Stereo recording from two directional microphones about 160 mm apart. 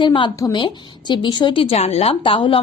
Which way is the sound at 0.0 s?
30° left (ahead or behind).